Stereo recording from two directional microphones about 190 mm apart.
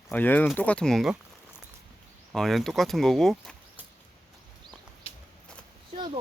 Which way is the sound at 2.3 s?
Centre (ahead or behind).